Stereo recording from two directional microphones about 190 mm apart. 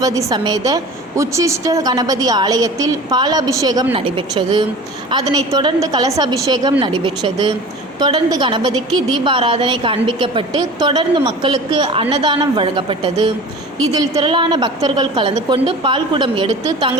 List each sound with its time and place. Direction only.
0.0 s a woman's voice: 20° right (ahead or behind)